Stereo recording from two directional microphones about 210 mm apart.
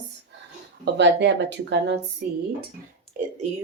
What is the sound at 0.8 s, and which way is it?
Speech, 55° right (ahead or behind).